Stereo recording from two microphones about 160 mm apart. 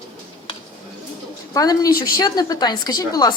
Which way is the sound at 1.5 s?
25° left (ahead or behind).